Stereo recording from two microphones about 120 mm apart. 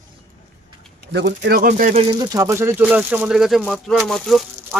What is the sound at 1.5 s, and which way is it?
Speech, 85° right.